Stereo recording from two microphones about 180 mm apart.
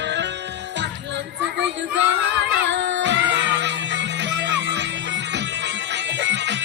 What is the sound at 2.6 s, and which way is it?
Music, 80° right.